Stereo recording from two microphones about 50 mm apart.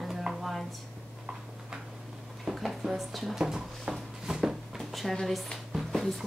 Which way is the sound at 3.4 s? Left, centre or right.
Centre.